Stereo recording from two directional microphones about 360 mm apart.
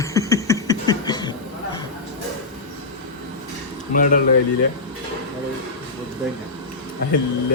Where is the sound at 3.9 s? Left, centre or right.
Left.